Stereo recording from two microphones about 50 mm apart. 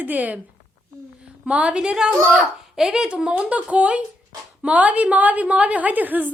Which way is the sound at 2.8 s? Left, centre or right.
Centre.